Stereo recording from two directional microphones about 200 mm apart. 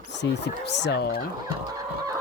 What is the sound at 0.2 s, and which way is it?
Speech, 55° left (ahead or behind).